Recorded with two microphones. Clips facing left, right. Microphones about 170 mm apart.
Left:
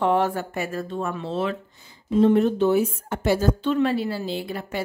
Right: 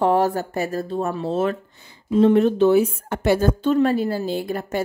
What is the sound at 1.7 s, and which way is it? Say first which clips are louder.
A woman's voice: right 1 dB; 65° right (ahead or behind).